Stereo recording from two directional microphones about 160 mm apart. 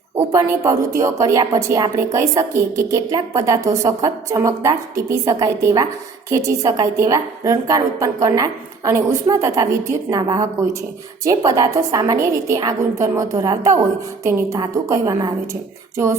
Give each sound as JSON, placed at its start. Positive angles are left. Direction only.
{"t": 0.2, "sound": "speech", "side_deg": -20}